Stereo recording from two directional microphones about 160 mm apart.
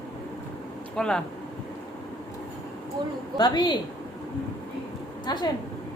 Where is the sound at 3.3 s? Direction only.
25° left (ahead or behind).